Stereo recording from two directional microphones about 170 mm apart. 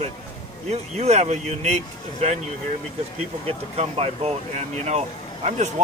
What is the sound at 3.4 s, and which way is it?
Speech, 40° right (ahead or behind).